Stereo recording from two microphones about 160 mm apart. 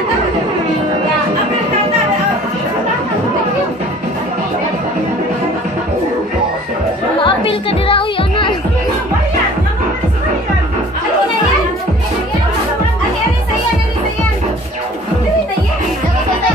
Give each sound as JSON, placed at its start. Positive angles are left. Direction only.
{"t": 7.2, "sound": "music", "side_deg": 35}